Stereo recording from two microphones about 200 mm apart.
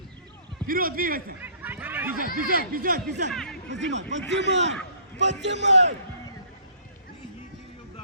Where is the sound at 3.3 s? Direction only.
Centre (ahead or behind).